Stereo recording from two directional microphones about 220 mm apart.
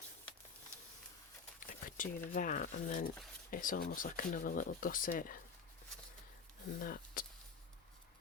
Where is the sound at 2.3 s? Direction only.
35° left (ahead or behind).